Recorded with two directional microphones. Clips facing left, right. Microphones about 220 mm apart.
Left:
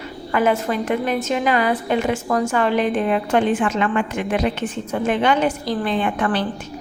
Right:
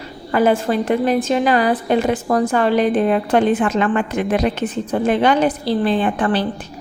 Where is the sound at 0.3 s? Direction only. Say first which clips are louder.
Right 3 dB; 35° right (ahead or behind).